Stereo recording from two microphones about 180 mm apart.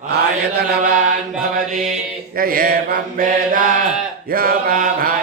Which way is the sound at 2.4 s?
55° right (ahead or behind).